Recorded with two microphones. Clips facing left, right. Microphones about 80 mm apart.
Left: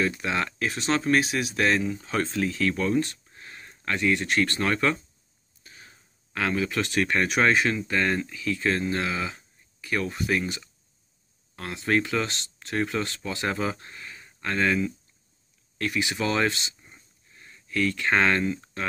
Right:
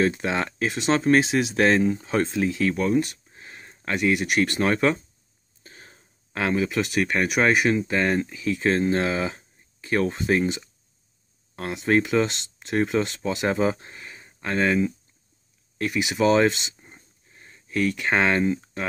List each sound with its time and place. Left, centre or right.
0.0 s speech: right
2.0 s speech: right
5.6 s a sound: right
6.3 s speech: right